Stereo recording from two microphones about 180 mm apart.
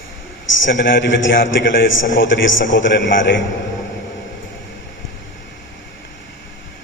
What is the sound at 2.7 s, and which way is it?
Speech, 90° left.